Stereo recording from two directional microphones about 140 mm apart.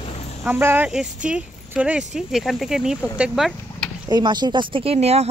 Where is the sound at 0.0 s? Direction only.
50° left (ahead or behind).